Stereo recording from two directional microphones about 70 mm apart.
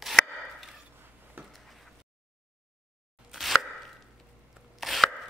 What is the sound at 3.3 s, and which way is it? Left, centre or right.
Chopping, centre.